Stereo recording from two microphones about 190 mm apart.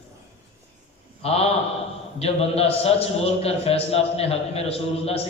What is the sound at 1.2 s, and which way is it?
A man's voice, 30° left (ahead or behind).